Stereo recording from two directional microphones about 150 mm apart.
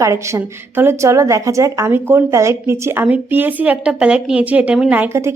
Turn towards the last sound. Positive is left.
turn(degrees=-15)  # may be behind; listen again after turning